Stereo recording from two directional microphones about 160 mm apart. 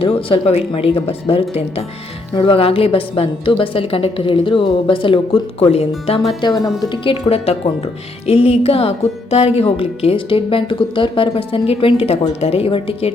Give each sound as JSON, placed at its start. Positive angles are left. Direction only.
{"t": 0.0, "sound": "a woman's voice", "side_deg": 35}
{"t": 6.4, "sound": "a woman's voice", "side_deg": 25}